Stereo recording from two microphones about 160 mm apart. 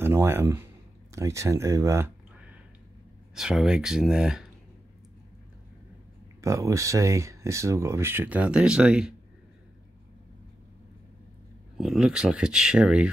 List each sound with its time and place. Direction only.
0.0 s speech: 15° right (ahead or behind)
3.3 s speech: 5° right (ahead or behind)
6.4 s speech: 20° right (ahead or behind)
11.8 s speech: 5° right (ahead or behind)